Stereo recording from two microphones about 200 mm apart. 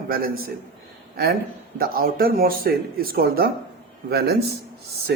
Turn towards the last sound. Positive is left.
turn(degrees=-55)  # may be behind; listen again after turning